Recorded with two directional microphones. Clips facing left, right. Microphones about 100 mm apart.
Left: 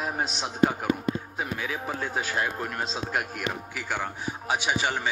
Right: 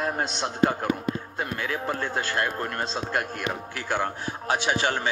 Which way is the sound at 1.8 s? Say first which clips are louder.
Right 1 dB; 5° left (ahead or behind).